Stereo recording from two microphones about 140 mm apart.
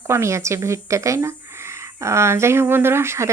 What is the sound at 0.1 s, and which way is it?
A woman's voice, 20° right (ahead or behind).